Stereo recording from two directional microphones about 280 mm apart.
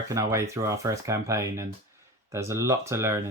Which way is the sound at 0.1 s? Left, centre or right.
Centre.